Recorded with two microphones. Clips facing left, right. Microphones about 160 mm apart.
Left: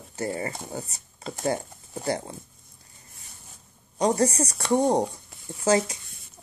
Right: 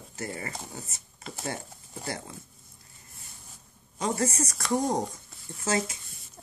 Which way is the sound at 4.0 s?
35° left (ahead or behind).